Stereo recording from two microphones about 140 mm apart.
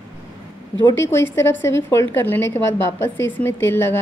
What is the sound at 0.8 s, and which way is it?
A woman's voice, 20° left (ahead or behind).